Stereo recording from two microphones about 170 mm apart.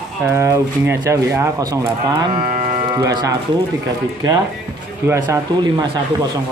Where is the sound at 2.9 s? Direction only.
25° right (ahead or behind).